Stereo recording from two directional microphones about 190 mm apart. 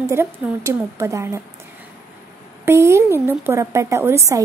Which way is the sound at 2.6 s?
15° right (ahead or behind).